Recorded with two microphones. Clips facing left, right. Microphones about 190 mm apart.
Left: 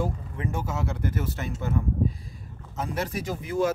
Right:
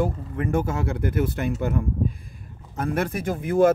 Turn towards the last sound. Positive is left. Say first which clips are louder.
# right 7 dB
turn(degrees=-55)  # may be behind; listen again after turning